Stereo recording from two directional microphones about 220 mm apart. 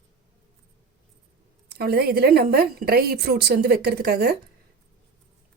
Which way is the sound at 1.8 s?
45° right (ahead or behind).